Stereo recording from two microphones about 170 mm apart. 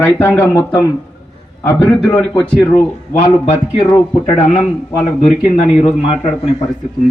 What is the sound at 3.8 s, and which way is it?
Speech, 30° left (ahead or behind).